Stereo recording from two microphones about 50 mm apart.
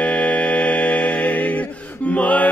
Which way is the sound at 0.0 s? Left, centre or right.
Left.